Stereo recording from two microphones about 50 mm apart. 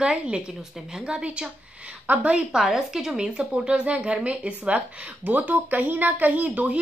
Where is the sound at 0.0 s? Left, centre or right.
Centre.